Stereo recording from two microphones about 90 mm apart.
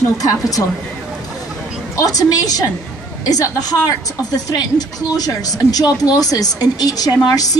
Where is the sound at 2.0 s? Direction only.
40° left (ahead or behind).